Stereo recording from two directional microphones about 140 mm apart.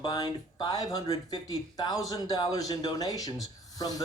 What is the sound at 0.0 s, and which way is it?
Speech, 30° left (ahead or behind).